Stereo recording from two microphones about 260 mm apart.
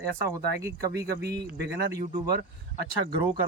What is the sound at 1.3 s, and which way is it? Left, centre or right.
Speech, right.